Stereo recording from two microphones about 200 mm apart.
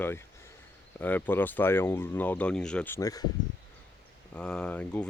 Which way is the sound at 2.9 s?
20° left (ahead or behind).